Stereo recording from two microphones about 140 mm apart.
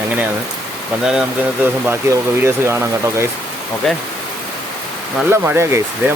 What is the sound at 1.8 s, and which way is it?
Speech, 15° right (ahead or behind).